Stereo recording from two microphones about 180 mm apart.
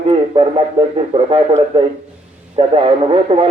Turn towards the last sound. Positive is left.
turn(degrees=-30)  # may be behind; listen again after turning